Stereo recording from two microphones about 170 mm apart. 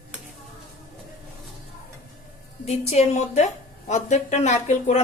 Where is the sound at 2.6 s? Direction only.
40° left (ahead or behind).